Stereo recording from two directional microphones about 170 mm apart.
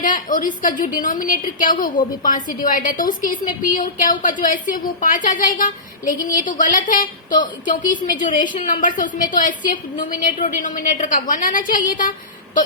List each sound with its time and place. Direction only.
0.0 s a woman's voice: 50° left (ahead or behind)